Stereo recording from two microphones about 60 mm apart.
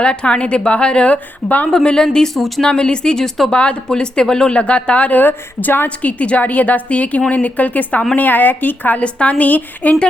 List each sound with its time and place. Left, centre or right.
0.0 s speech: centre
1.7 s speech: centre
3.5 s speech: centre